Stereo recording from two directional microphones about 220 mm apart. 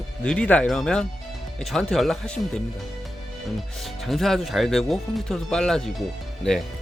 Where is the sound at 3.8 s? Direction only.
Centre (ahead or behind).